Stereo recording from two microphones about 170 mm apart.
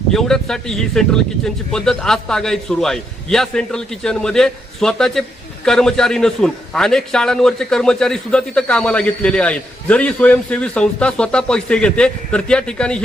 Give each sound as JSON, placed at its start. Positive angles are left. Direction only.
{"t": 0.1, "sound": "a man's voice", "side_deg": 5}